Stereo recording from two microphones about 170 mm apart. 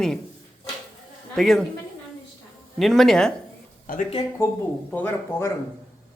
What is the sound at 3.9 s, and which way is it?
Speech, 55° left (ahead or behind).